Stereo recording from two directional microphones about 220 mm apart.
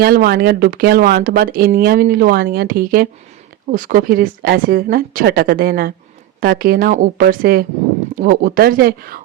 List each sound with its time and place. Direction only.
0.0 s a woman's voice: 45° right (ahead or behind)